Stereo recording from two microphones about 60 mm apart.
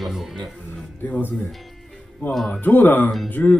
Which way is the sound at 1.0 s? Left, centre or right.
Left.